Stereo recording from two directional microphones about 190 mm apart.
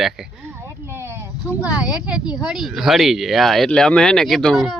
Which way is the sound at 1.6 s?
5° right (ahead or behind).